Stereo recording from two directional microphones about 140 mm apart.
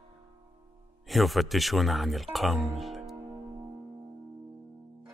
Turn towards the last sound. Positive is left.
turn(degrees=0)  # may be behind; listen again after turning